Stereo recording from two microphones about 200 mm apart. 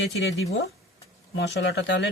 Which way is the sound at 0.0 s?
65° left (ahead or behind).